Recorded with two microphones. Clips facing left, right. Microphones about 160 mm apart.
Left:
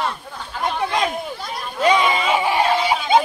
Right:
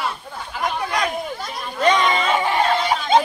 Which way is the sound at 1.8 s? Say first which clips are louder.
Left 1 dB; 5° left (ahead or behind).